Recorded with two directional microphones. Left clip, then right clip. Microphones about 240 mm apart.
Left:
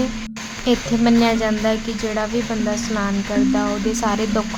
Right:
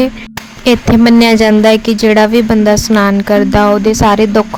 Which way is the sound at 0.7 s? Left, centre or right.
Right.